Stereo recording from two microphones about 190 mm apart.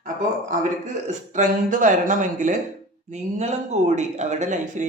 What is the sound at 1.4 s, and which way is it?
Speech, 40° right (ahead or behind).